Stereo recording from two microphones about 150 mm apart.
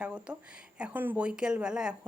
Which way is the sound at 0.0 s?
5° right (ahead or behind).